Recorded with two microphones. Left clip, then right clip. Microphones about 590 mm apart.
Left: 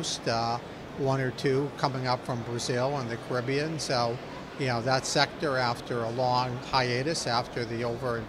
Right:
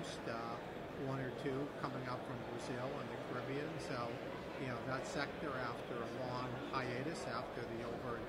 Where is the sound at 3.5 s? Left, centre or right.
Left.